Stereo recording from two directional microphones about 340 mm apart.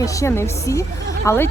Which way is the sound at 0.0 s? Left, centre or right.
Centre.